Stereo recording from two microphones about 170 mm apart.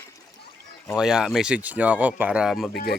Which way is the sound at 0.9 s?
5° right (ahead or behind).